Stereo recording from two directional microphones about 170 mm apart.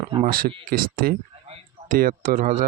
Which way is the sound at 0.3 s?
60° right (ahead or behind).